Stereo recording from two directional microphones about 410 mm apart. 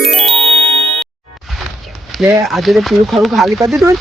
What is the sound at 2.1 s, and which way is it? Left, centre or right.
Speech, centre.